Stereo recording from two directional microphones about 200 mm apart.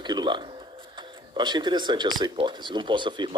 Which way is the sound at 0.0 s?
20° right (ahead or behind).